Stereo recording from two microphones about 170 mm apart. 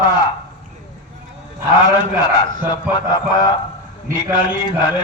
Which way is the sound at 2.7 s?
25° left (ahead or behind).